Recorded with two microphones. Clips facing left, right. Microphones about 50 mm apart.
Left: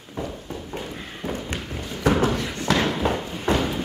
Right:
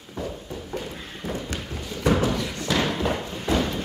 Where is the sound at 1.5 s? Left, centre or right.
Left.